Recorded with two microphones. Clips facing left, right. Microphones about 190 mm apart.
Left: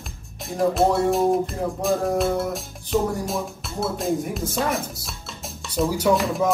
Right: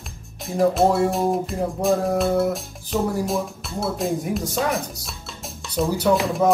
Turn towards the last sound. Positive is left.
turn(degrees=0)  # may be behind; listen again after turning